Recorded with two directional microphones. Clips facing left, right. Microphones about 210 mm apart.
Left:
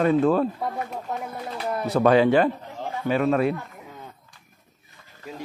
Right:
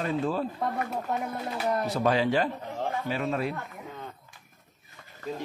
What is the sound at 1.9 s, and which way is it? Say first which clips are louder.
Speech: left 10 dB; 60° left (ahead or behind).